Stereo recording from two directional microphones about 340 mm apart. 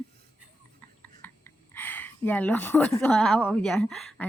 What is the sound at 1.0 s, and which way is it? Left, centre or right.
A woman's voice, centre.